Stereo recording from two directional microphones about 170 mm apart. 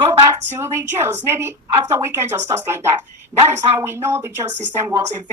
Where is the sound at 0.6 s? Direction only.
15° right (ahead or behind).